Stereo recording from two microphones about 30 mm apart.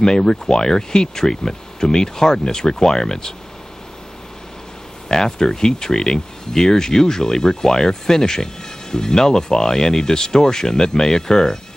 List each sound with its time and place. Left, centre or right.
0.0 s speech: left
5.0 s speech: left